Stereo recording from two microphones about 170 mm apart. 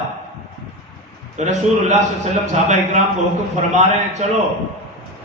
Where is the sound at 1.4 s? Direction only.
40° right (ahead or behind).